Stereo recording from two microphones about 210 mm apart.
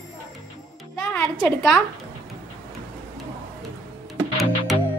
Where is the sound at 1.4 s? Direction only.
Centre (ahead or behind).